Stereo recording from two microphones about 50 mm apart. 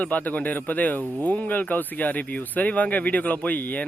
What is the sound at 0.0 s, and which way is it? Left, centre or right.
Speech, left.